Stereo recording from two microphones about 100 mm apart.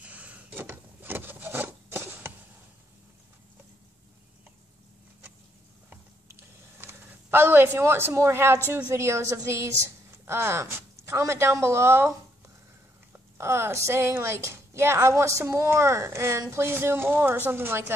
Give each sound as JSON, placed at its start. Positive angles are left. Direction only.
{"t": 0.0, "sound": "wood", "side_deg": -15}
{"t": 6.8, "sound": "a woman's voice", "side_deg": -25}
{"t": 13.1, "sound": "a woman's voice", "side_deg": -25}